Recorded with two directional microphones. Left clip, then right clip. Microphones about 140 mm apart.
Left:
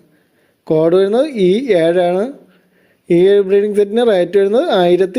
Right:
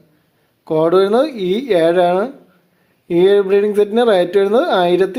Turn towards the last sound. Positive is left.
turn(degrees=40)  # may be behind; listen again after turning